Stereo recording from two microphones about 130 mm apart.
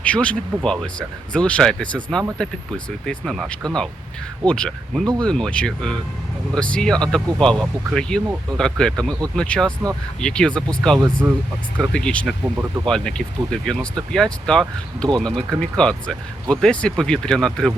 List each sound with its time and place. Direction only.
0.0 s speech: 10° left (ahead or behind)
4.4 s speech: 5° left (ahead or behind)
11.2 s speech: 25° right (ahead or behind)
11.8 s speech: 5° left (ahead or behind)